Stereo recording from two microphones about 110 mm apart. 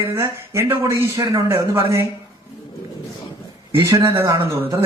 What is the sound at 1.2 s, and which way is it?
Speech, 35° right (ahead or behind).